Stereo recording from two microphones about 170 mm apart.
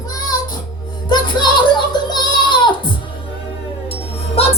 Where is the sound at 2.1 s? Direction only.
25° left (ahead or behind).